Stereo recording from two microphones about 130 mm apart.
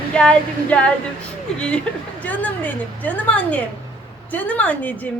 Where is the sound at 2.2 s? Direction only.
10° left (ahead or behind).